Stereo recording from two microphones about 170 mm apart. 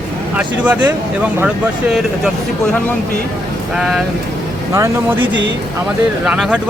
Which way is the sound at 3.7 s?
Centre (ahead or behind).